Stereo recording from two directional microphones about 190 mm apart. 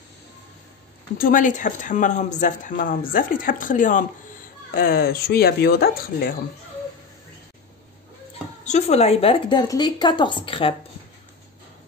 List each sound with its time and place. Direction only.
1.1 s speech: 45° left (ahead or behind)
8.6 s a woman's voice: 35° left (ahead or behind)